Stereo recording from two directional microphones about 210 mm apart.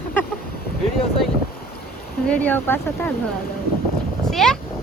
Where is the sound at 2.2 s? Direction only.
5° left (ahead or behind).